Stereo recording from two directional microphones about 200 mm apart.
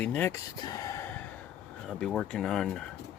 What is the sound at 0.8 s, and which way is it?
Gasp, 15° left (ahead or behind).